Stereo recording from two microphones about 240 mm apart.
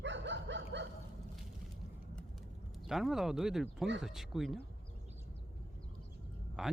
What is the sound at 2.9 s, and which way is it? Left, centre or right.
Speech, centre.